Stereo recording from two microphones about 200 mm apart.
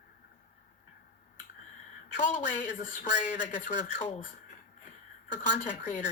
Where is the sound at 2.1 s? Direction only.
40° left (ahead or behind).